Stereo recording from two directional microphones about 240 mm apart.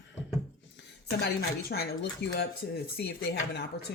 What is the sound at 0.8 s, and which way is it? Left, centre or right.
Speech, left.